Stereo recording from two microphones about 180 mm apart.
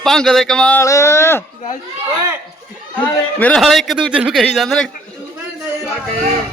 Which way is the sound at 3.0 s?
5° left (ahead or behind).